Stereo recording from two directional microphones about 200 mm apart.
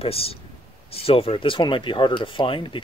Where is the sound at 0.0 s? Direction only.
30° left (ahead or behind).